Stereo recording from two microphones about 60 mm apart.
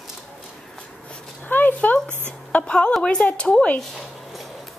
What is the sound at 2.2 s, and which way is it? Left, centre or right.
A woman's voice, left.